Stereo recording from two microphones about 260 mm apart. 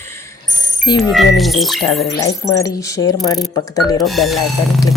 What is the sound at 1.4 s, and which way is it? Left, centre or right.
Speech, centre.